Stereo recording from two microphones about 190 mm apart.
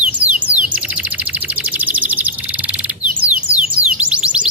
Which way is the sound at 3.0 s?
5° right (ahead or behind).